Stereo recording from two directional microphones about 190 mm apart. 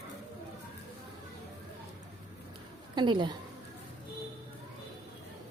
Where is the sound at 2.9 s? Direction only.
25° right (ahead or behind).